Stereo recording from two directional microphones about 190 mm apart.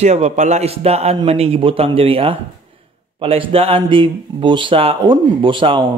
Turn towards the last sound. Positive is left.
turn(degrees=-25)  # may be behind; listen again after turning